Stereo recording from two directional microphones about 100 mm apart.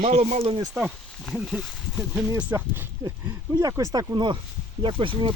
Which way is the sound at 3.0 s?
35° right (ahead or behind).